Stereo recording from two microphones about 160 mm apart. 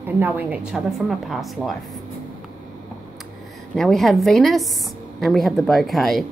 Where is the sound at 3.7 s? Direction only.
Centre (ahead or behind).